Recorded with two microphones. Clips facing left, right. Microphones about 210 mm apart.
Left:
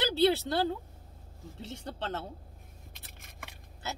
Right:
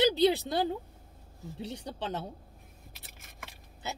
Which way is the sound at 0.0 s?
15° right (ahead or behind).